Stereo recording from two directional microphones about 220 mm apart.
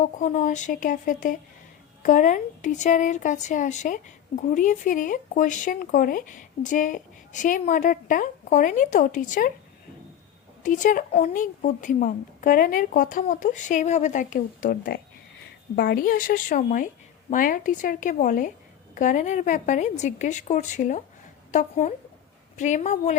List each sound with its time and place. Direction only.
0.0 s speech: 35° left (ahead or behind)
10.6 s speech: 35° left (ahead or behind)